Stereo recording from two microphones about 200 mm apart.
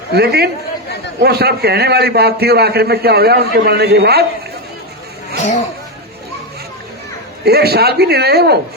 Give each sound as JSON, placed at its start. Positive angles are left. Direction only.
{"t": 0.1, "sound": "a man's voice", "side_deg": -55}
{"t": 7.4, "sound": "a man's voice", "side_deg": -50}